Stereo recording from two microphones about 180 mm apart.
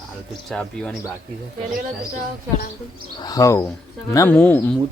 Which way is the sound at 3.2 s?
20° left (ahead or behind).